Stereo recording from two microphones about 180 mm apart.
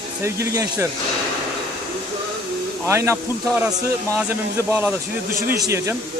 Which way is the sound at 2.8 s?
15° right (ahead or behind).